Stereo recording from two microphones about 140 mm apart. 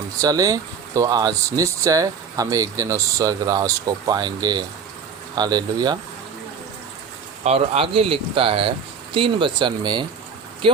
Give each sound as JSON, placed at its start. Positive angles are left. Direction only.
{"t": 0.2, "sound": "speech", "side_deg": -25}
{"t": 7.4, "sound": "speech", "side_deg": -45}